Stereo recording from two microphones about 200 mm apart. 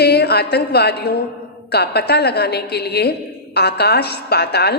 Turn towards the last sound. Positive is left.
turn(degrees=55)  # may be behind; listen again after turning